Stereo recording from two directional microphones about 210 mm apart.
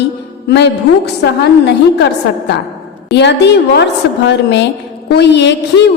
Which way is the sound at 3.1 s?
55° left (ahead or behind).